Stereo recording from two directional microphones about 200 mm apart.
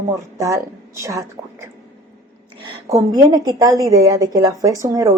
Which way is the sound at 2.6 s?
20° right (ahead or behind).